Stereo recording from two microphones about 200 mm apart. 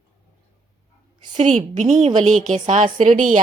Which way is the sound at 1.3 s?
35° right (ahead or behind).